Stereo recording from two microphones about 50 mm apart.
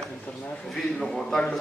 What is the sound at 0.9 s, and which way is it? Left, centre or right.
Speech, centre.